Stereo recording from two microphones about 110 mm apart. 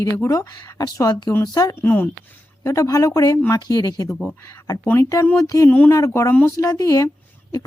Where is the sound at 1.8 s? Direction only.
15° left (ahead or behind).